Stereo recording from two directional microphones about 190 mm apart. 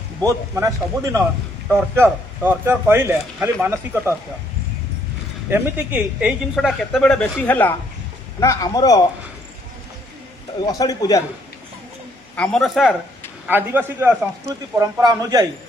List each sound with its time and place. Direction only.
0.3 s speech: 15° right (ahead or behind)
5.5 s speech: 10° right (ahead or behind); by 9.0 s 20° left (ahead or behind)
10.6 s speech: 20° left (ahead or behind)
12.4 s speech: centre (ahead or behind)
13.5 s a man's voice: 10° right (ahead or behind)